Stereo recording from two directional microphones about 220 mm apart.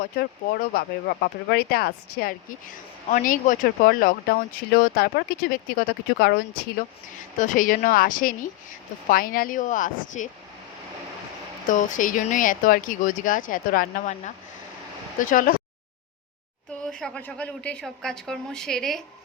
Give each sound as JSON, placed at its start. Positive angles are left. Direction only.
{"t": 0.0, "sound": "speech", "side_deg": 40}
{"t": 11.7, "sound": "speech", "side_deg": 35}
{"t": 16.8, "sound": "speech", "side_deg": 5}